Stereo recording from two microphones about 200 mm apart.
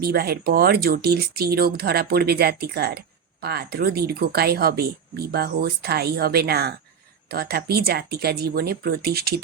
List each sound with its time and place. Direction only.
0.0 s speech: 50° right (ahead or behind)